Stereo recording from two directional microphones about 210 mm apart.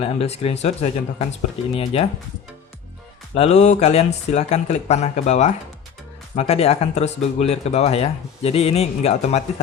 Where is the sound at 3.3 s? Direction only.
30° left (ahead or behind).